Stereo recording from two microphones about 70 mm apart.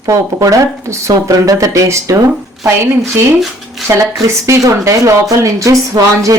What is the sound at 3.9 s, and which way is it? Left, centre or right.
Speech, right.